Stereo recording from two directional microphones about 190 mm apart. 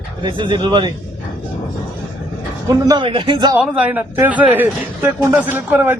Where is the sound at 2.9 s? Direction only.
25° right (ahead or behind).